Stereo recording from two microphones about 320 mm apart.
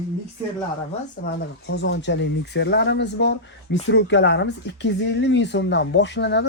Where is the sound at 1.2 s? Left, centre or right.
Left.